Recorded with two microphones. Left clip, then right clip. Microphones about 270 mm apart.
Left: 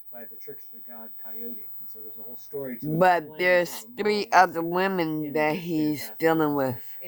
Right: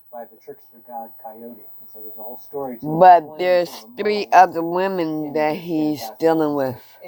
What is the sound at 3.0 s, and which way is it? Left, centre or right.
Speech, centre.